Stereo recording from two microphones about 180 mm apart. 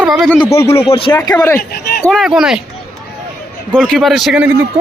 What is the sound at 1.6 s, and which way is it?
Speech, 55° left (ahead or behind).